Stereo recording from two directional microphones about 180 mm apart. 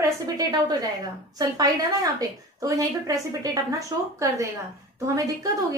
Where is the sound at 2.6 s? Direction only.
20° right (ahead or behind).